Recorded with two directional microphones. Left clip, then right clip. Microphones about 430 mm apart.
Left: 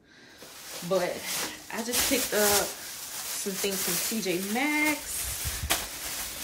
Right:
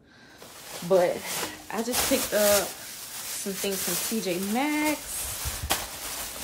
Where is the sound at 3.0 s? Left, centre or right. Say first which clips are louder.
Left 1 dB; centre.